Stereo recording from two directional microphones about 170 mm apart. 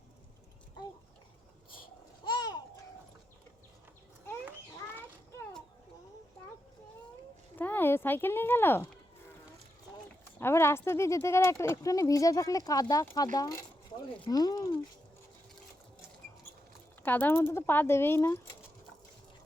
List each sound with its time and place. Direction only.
1.8 s babbling: 25° left (ahead or behind)
4.4 s a sound: 10° right (ahead or behind)
7.5 s speech: 10° left (ahead or behind)
10.4 s speech: 15° left (ahead or behind)
17.0 s speech: 10° left (ahead or behind)